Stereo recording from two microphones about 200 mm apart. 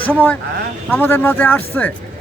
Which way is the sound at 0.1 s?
10° left (ahead or behind).